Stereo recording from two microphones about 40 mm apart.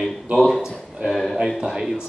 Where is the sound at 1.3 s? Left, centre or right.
Centre.